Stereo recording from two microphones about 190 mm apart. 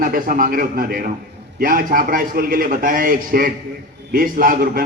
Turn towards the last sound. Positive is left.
turn(degrees=-45)  # may be behind; listen again after turning